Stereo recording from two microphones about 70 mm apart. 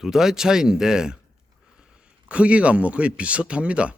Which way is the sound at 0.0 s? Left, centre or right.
Centre.